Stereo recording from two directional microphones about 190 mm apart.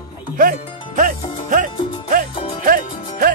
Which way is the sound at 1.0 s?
45° right (ahead or behind).